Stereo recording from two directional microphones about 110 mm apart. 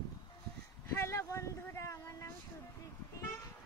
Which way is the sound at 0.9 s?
25° left (ahead or behind).